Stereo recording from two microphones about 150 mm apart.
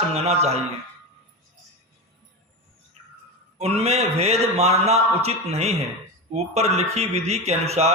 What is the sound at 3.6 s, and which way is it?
A man's voice, 45° right (ahead or behind).